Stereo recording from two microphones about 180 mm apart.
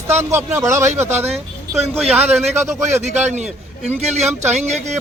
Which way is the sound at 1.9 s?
5° right (ahead or behind).